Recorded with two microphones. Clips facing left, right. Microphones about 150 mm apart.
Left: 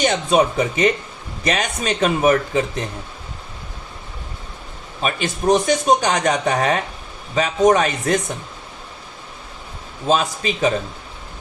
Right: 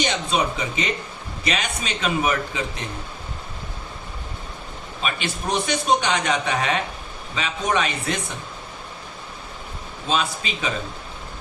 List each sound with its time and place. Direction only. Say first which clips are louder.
0.0 s speech: left 6 dB; 50° left (ahead or behind)
5.0 s speech: left 8 dB; 45° left (ahead or behind)
10.1 s speech: left 6 dB; 45° left (ahead or behind)